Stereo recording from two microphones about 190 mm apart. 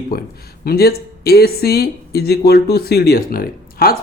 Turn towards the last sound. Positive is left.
turn(degrees=50)  # may be behind; listen again after turning